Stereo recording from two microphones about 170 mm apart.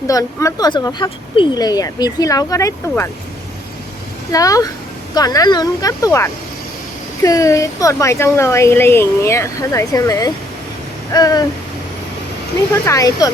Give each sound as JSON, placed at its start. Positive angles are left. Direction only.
{"t": 0.1, "sound": "speech", "side_deg": 20}
{"t": 4.3, "sound": "speech", "side_deg": 20}
{"t": 12.8, "sound": "speech", "side_deg": 20}